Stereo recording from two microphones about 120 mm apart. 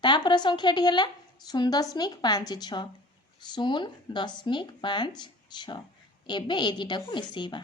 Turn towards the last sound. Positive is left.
turn(degrees=40)  # may be behind; listen again after turning